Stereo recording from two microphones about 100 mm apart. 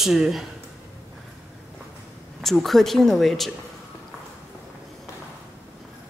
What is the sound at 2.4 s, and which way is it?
Speech, 5° left (ahead or behind).